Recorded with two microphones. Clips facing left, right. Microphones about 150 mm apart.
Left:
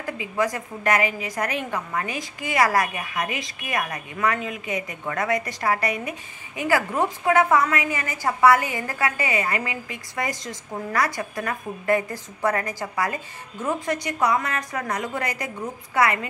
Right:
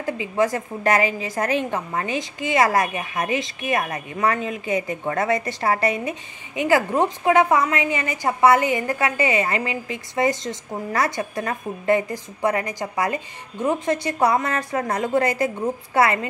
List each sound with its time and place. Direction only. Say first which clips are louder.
0.0 s a woman's voice: right 4 dB; 25° right (ahead or behind)